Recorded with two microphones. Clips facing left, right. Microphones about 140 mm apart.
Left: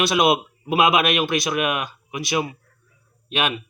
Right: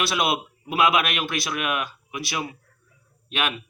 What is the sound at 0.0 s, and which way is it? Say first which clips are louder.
Speech: left 6 dB; 20° left (ahead or behind).